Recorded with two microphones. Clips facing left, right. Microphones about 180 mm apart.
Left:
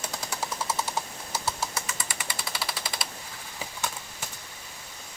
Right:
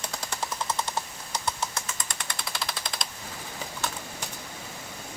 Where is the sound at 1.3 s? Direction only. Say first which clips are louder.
Even; 5° left (ahead or behind).